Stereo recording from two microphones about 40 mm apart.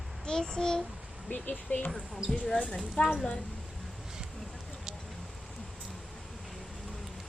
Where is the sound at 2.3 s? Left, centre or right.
Centre.